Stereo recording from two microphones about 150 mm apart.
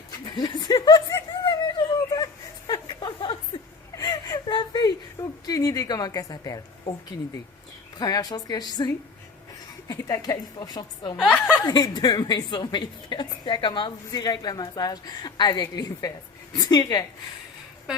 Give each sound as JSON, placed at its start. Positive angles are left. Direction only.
{"t": 0.3, "sound": "a sound", "side_deg": 30}
{"t": 7.9, "sound": "a woman's voice", "side_deg": 25}
{"t": 9.9, "sound": "a woman's voice", "side_deg": 25}